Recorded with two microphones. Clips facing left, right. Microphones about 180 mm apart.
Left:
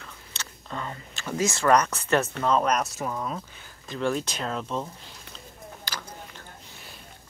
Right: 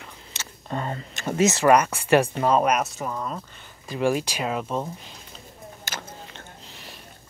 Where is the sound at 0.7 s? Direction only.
50° right (ahead or behind).